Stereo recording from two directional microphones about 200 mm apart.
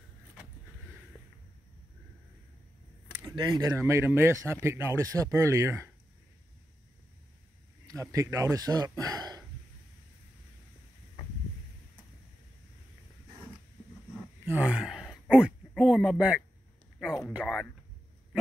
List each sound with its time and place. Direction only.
3.3 s speech: 20° right (ahead or behind)
7.8 s speech: 15° right (ahead or behind)
14.4 s a sound: 5° right (ahead or behind)